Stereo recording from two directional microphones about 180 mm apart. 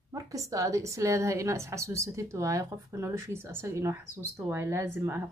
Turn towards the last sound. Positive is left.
turn(degrees=-15)  # may be behind; listen again after turning